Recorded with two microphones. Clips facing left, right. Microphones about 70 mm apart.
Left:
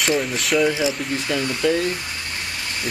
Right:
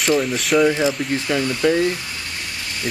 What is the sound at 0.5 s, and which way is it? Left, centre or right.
Speech, right.